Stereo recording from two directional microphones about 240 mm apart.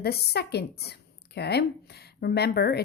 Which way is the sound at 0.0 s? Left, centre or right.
Left.